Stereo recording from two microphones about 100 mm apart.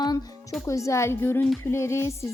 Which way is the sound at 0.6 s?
30° left (ahead or behind).